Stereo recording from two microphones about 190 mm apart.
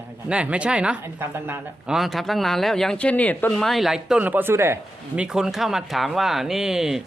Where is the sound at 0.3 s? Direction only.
5° right (ahead or behind).